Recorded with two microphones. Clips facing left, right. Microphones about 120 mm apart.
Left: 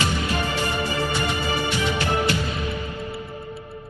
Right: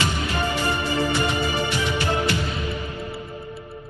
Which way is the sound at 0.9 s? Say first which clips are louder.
Right 2 dB; 20° right (ahead or behind).